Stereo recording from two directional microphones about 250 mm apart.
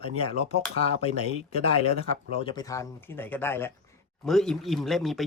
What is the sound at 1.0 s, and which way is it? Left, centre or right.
Speech, left.